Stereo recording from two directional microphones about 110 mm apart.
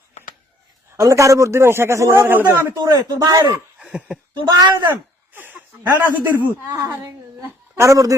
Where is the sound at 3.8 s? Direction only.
10° right (ahead or behind).